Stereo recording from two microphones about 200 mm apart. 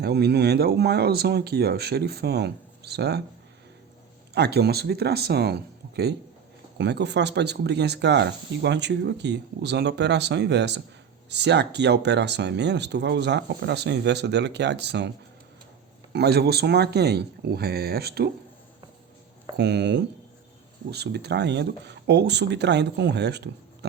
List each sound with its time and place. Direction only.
0.0 s speech: 55° right (ahead or behind)
4.4 s speech: 55° right (ahead or behind)
16.1 s speech: 55° right (ahead or behind)
19.5 s speech: 60° right (ahead or behind)